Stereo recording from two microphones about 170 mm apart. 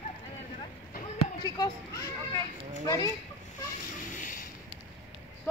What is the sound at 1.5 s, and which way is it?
Speech, 20° left (ahead or behind).